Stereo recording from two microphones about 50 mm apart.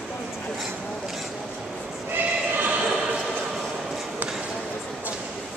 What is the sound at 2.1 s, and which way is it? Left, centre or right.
Sheep, right.